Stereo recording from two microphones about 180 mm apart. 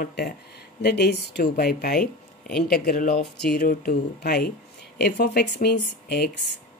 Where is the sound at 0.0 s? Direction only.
60° left (ahead or behind).